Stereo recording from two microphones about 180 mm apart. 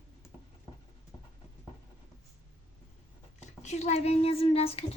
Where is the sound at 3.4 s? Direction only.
40° left (ahead or behind).